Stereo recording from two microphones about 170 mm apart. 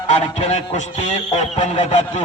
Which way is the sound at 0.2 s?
40° left (ahead or behind).